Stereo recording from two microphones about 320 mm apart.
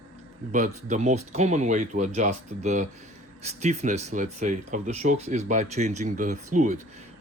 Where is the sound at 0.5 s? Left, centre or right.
Right.